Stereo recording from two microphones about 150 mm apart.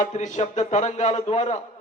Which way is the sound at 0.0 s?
55° left (ahead or behind).